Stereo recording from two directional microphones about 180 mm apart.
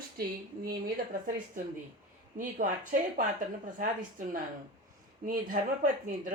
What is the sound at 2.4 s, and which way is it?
Speech, 50° right (ahead or behind).